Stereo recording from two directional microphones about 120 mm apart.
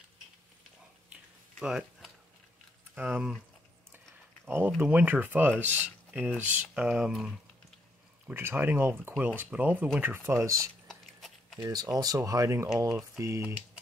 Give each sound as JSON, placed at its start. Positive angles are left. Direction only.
{"t": 1.6, "sound": "speech", "side_deg": -5}
{"t": 4.5, "sound": "speech", "side_deg": -20}
{"t": 8.3, "sound": "speech", "side_deg": -20}
{"t": 10.9, "sound": "biting", "side_deg": 0}
{"t": 11.6, "sound": "speech", "side_deg": -35}